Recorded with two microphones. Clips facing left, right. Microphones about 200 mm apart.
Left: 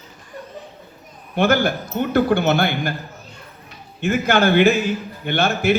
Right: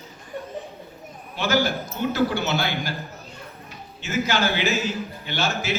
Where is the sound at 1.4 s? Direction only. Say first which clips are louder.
Left 5 dB; 55° left (ahead or behind).